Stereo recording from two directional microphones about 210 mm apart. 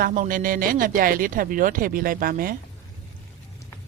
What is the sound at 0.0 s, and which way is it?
Speech, 40° right (ahead or behind).